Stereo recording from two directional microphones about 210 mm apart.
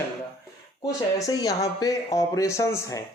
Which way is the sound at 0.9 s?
15° left (ahead or behind).